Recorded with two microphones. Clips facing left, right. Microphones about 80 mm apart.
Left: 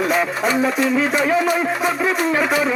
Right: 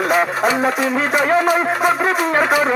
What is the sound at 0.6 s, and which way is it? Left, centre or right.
Music, right.